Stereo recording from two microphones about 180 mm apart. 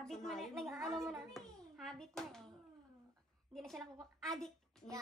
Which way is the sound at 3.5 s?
Centre (ahead or behind).